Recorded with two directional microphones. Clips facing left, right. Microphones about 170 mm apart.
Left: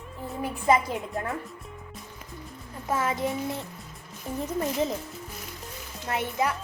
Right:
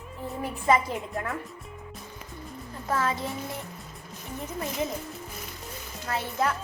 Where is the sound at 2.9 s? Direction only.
20° left (ahead or behind).